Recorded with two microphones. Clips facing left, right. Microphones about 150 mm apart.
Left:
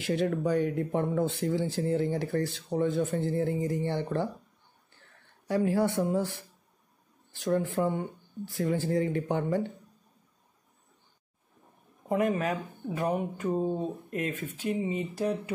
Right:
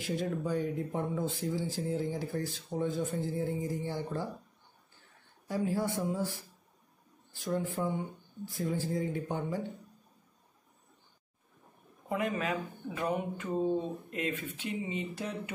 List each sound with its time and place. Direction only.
0.0 s speech: 75° left (ahead or behind)
5.5 s speech: 75° left (ahead or behind)
12.1 s speech: 45° left (ahead or behind)